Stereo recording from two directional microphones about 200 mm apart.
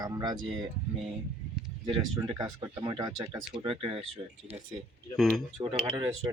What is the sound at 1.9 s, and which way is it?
Speech, 20° right (ahead or behind).